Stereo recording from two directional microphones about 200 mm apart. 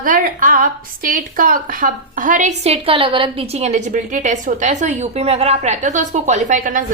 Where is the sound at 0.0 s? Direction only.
45° right (ahead or behind).